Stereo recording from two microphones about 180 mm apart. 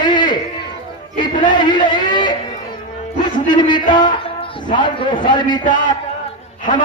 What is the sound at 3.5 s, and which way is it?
A man's voice, 25° left (ahead or behind).